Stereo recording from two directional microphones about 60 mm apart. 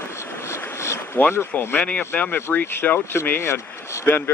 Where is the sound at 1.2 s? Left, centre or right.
Left.